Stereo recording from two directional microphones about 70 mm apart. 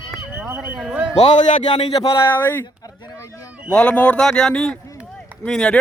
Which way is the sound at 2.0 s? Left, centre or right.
Left.